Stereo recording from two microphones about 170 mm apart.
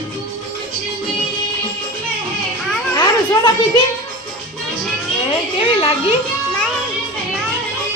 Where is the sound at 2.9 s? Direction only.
25° left (ahead or behind).